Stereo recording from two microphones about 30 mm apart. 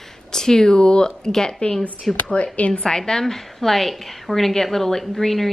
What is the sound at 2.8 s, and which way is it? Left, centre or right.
Speech, left.